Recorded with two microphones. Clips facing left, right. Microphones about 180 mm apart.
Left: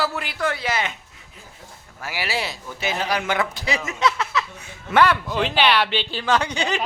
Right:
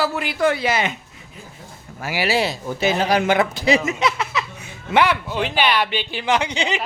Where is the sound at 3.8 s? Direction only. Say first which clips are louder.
Right 1 dB; 15° right (ahead or behind).